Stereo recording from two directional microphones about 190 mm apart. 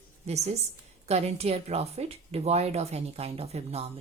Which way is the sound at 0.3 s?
35° right (ahead or behind).